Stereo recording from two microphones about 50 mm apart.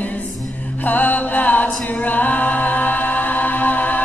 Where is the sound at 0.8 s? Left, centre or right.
Left.